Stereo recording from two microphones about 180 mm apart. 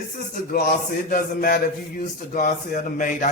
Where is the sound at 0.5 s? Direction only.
50° left (ahead or behind).